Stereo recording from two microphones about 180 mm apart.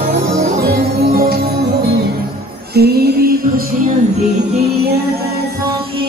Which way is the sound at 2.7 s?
60° right (ahead or behind).